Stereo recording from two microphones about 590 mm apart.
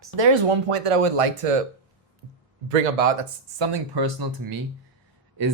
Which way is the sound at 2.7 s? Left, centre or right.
Right.